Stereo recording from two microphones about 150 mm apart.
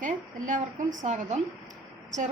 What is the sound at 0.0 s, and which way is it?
A woman's voice, 60° right (ahead or behind).